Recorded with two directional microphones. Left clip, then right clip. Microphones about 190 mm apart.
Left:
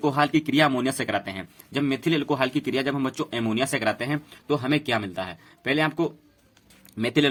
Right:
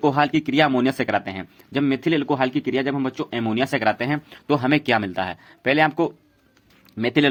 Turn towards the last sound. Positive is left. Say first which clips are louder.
# right 3 dB
turn(degrees=-25)  # may be behind; listen again after turning